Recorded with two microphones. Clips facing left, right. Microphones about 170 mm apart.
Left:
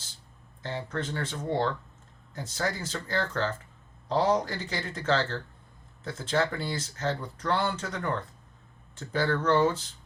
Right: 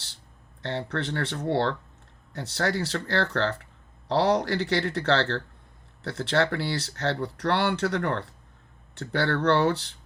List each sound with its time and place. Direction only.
0.6 s speech: 70° right (ahead or behind)